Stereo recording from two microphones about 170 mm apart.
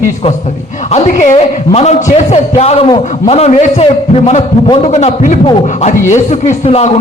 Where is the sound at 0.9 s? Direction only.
45° left (ahead or behind).